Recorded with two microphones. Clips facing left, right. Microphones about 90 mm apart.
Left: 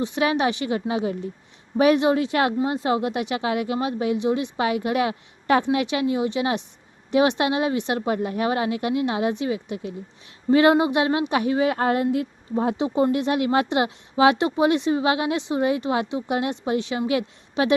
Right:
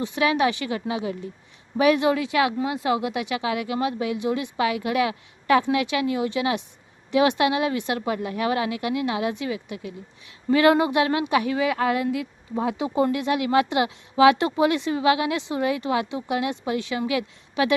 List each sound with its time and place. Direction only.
0.0 s a woman's voice: 25° left (ahead or behind)